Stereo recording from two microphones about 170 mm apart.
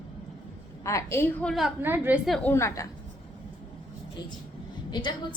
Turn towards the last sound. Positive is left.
turn(degrees=25)  # may be behind; listen again after turning